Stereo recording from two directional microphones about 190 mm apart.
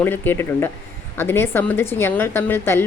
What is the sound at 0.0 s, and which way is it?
A woman's voice, 10° left (ahead or behind).